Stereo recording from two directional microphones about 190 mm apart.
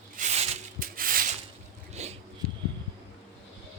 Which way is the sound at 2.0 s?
35° right (ahead or behind).